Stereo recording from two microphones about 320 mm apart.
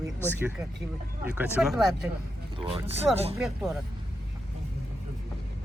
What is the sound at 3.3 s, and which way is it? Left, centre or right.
Speech, centre.